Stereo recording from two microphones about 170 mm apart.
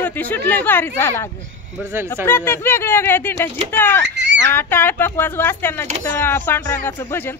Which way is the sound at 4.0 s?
90° right.